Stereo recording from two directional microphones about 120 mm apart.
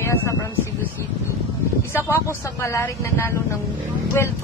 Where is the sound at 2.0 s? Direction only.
20° left (ahead or behind).